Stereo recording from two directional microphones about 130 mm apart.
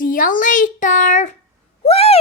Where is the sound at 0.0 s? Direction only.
90° left; by 1.4 s 70° left (ahead or behind).